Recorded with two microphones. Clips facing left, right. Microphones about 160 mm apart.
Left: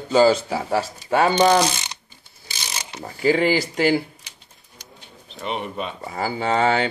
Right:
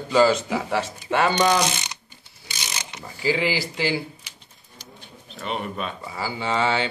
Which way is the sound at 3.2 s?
50° left (ahead or behind).